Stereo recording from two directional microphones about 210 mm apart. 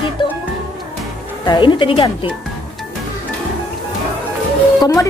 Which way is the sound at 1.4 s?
20° left (ahead or behind).